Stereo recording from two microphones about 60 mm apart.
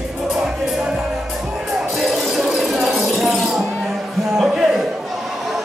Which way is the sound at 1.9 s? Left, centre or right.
Centre.